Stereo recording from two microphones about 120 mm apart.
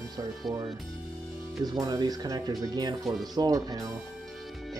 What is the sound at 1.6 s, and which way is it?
Speech, 35° right (ahead or behind).